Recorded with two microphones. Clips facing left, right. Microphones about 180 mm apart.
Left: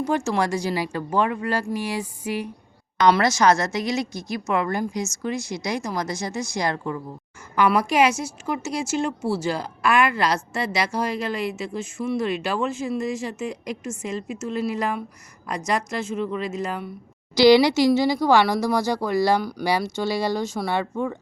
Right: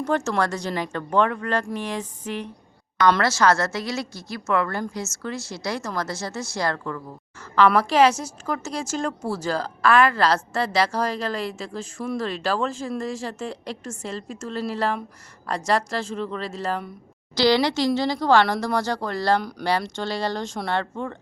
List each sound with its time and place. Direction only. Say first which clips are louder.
0.0 s a woman's voice: even; 10° left (ahead or behind)
16.1 s a woman's voice: left 3 dB; 5° left (ahead or behind)